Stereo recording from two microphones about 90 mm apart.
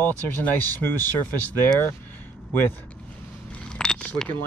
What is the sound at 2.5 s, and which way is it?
Speech, 25° left (ahead or behind).